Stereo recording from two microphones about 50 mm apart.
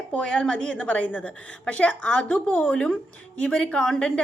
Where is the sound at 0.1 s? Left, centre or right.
Left.